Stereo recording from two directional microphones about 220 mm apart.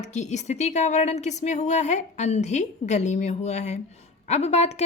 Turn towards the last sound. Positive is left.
turn(degrees=30)  # may be behind; listen again after turning